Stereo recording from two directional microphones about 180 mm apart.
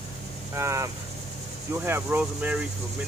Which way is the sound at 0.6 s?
15° right (ahead or behind).